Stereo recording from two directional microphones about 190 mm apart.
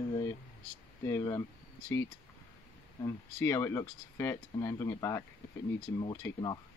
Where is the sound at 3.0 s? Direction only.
15° left (ahead or behind).